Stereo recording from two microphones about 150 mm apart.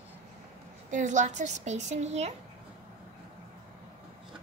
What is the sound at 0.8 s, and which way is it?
A woman's voice, 55° right (ahead or behind).